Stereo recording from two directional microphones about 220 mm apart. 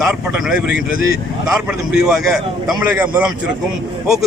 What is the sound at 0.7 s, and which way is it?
Speech, 40° left (ahead or behind).